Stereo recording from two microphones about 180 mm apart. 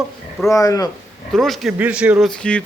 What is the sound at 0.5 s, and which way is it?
Speech, 20° left (ahead or behind).